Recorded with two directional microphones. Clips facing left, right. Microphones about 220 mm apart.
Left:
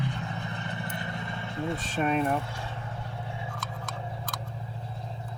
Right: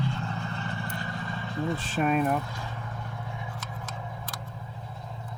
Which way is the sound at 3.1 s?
30° left (ahead or behind).